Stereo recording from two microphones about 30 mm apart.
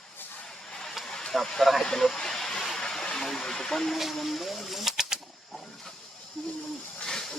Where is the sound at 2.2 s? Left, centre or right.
Centre.